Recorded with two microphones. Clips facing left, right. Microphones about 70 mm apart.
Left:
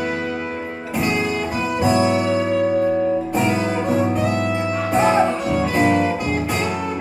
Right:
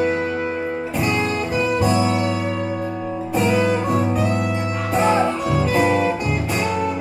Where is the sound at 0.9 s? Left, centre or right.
Centre.